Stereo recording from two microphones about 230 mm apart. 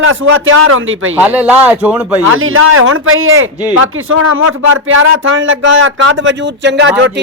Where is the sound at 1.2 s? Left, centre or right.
Centre.